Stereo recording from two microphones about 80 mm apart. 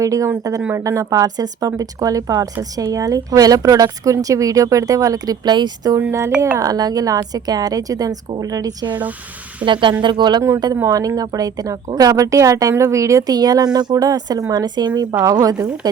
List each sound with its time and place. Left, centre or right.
0.0 s speech: right
6.1 s speech: right
6.6 s speech: right
9.6 s speech: right
10.8 s speech: right
15.2 s speech: right